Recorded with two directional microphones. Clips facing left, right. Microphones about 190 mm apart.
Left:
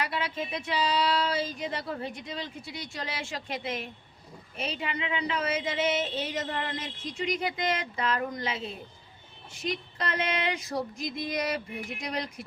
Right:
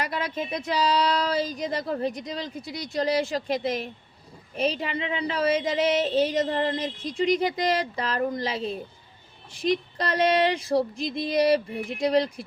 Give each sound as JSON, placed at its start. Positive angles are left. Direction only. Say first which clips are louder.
{"t": 0.0, "sound": "speech", "louder": "right 3 dB", "side_deg": -40}